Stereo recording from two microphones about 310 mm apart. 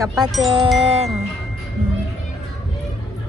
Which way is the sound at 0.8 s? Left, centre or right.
Centre.